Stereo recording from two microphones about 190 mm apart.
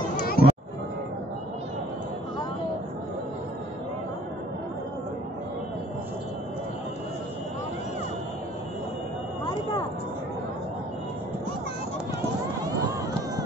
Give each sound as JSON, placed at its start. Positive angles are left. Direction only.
{"t": 0.4, "sound": "music", "side_deg": 50}